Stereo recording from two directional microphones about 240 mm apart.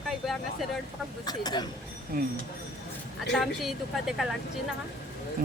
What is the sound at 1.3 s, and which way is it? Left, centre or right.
Speech, centre.